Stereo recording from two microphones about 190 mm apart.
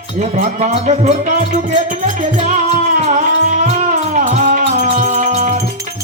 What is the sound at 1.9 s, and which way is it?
Music, 40° right (ahead or behind).